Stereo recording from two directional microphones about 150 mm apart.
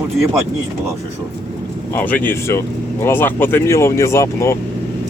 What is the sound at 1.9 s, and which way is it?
Speech, 10° left (ahead or behind).